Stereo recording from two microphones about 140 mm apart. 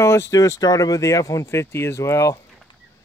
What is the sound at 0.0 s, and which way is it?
Speech, 20° left (ahead or behind).